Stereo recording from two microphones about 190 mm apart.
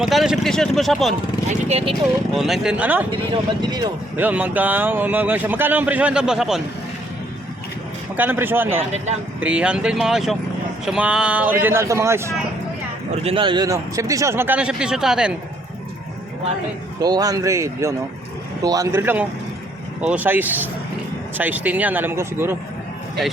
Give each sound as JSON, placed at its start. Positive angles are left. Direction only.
{"t": 0.0, "sound": "speech", "side_deg": 0}
{"t": 1.5, "sound": "speech", "side_deg": -35}
{"t": 2.3, "sound": "speech", "side_deg": 0}
{"t": 3.3, "sound": "speech", "side_deg": -20}
{"t": 4.2, "sound": "speech", "side_deg": -10}
{"t": 8.1, "sound": "speech", "side_deg": -10}
{"t": 13.2, "sound": "speech", "side_deg": -25}
{"t": 17.0, "sound": "speech", "side_deg": -20}